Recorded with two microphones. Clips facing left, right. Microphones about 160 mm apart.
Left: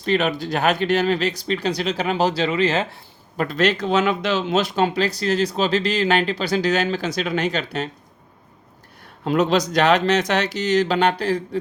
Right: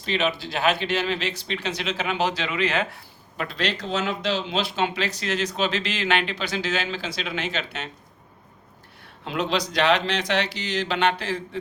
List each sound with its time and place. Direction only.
0.0 s speech: 45° left (ahead or behind)
9.2 s speech: 45° left (ahead or behind)